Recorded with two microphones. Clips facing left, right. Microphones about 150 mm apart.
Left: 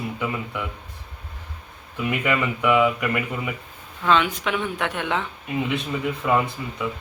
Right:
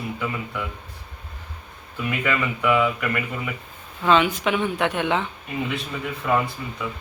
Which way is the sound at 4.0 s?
5° right (ahead or behind).